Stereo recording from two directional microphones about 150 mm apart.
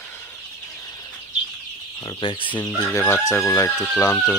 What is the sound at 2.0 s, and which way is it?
Speech, 35° left (ahead or behind).